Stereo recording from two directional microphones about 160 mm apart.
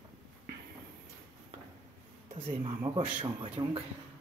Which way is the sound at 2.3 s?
40° right (ahead or behind).